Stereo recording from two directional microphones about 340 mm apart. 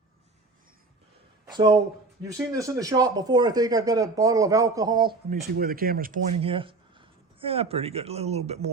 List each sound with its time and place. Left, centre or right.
1.5 s speech: centre
5.5 s speech: right